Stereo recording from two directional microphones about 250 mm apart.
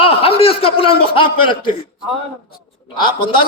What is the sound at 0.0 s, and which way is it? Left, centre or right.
A man's voice, left.